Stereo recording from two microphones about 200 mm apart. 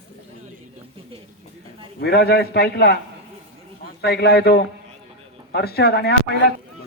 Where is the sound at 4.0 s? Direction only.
55° left (ahead or behind).